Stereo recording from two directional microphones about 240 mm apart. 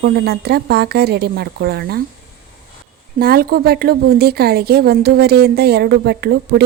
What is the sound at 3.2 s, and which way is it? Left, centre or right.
Speech, right.